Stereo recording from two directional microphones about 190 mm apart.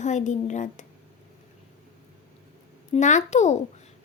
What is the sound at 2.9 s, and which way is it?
Speech, 40° left (ahead or behind).